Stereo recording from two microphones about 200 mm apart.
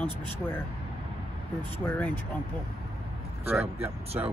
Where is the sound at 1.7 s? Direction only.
10° left (ahead or behind).